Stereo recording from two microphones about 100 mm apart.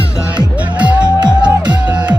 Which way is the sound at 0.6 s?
15° right (ahead or behind).